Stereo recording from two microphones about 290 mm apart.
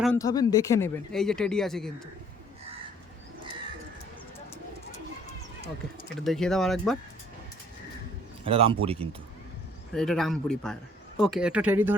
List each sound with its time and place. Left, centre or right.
0.0 s speech: centre
6.1 s speech: centre
8.4 s speech: centre
9.9 s speech: centre